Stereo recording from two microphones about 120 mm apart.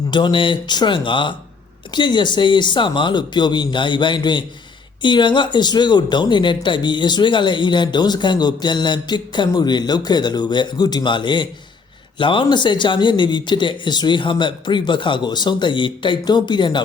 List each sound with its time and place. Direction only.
0.1 s speech: 40° left (ahead or behind)